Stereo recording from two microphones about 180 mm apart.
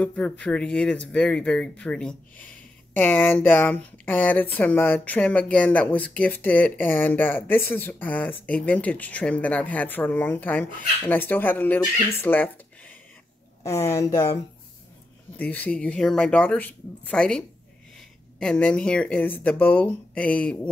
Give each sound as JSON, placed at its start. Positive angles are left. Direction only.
{"t": 0.0, "sound": "speech", "side_deg": 5}
{"t": 15.3, "sound": "speech", "side_deg": 10}